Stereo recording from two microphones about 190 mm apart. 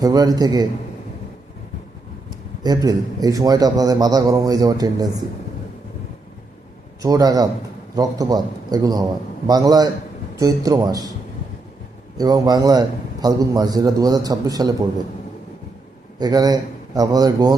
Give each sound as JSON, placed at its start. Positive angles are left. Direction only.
{"t": 0.0, "sound": "a man's voice", "side_deg": -20}
{"t": 2.6, "sound": "a man's voice", "side_deg": -20}
{"t": 7.0, "sound": "a man's voice", "side_deg": -20}
{"t": 12.1, "sound": "a man's voice", "side_deg": -20}
{"t": 16.1, "sound": "a man's voice", "side_deg": -20}